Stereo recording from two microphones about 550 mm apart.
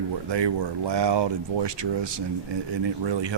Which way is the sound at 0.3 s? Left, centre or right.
Right.